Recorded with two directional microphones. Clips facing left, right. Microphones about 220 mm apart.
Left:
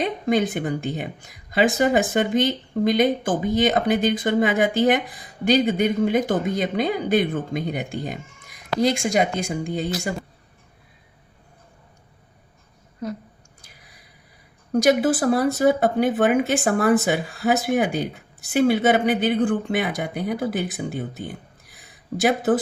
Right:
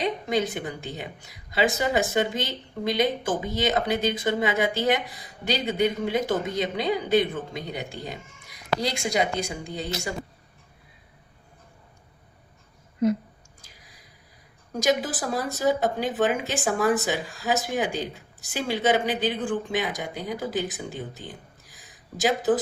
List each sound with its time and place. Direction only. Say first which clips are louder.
0.0 s speech: left 4 dB; 50° left (ahead or behind)
14.7 s speech: left 7 dB; 60° left (ahead or behind)
21.2 s a sound: left 6 dB; 60° left (ahead or behind)